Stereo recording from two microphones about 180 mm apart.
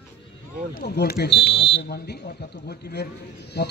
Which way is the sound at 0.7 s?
60° left (ahead or behind).